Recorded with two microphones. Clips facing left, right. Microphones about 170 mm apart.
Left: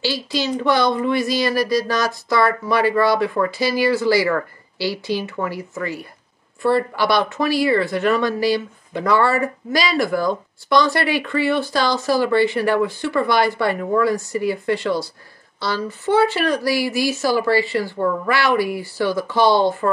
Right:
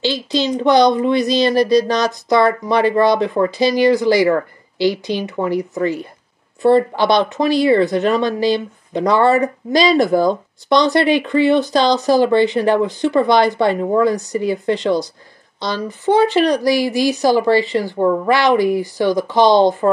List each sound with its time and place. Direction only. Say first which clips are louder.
0.0 s speech: right 4 dB; 20° right (ahead or behind)